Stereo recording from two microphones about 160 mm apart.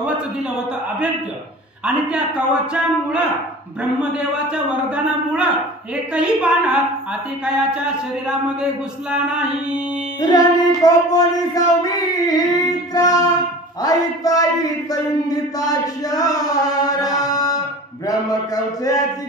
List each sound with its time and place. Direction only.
1.9 s a man's voice: 5° right (ahead or behind)
10.3 s female singing: 25° left (ahead or behind)